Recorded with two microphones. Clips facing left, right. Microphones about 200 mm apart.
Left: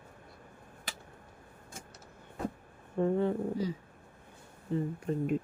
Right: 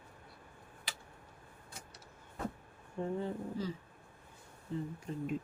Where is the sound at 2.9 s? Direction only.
60° left (ahead or behind).